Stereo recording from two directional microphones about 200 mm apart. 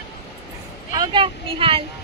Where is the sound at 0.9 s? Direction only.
20° right (ahead or behind).